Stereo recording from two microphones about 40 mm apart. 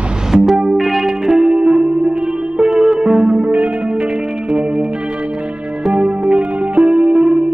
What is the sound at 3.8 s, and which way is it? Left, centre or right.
Music, right.